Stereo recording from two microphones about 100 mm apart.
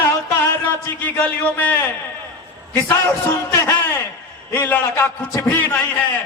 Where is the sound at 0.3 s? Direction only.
20° left (ahead or behind).